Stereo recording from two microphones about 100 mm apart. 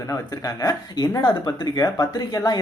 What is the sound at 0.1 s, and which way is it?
Speech, 35° left (ahead or behind).